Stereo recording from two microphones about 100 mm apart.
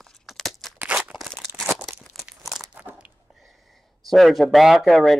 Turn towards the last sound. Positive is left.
turn(degrees=0)  # may be behind; listen again after turning